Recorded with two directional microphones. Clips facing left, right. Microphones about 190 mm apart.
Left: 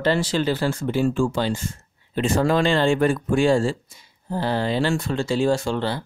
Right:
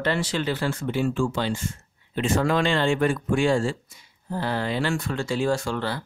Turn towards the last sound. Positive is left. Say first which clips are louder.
# left 3 dB
turn(degrees=25)  # may be behind; listen again after turning